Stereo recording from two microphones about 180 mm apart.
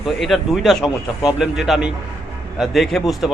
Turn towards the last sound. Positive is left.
turn(degrees=0)  # may be behind; listen again after turning